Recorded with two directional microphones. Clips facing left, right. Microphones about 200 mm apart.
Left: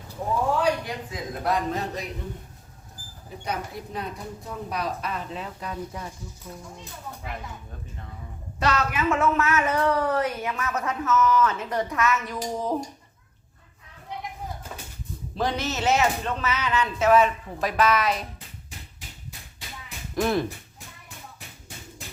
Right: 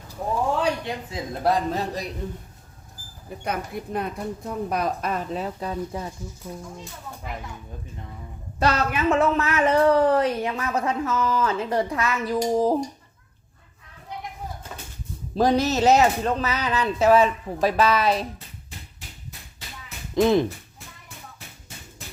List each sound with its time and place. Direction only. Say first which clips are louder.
0.6 s a man's voice: even; 25° right (ahead or behind)
3.4 s a woman's voice: right 3 dB; 55° right (ahead or behind); by 6.1 s 30° right (ahead or behind)
6.5 s speech: right 4 dB; 15° right (ahead or behind)
8.5 s a woman's voice: right 2 dB; 35° right (ahead or behind)
15.4 s a woman's voice: right 7 dB; 40° right (ahead or behind)
20.1 s speech: right 5 dB; 20° right (ahead or behind)